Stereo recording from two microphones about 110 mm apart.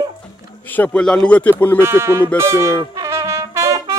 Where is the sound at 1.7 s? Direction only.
20° right (ahead or behind).